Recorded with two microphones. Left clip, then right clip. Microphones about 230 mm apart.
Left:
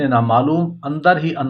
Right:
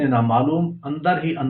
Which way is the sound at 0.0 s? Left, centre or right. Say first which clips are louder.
Left 4 dB; left.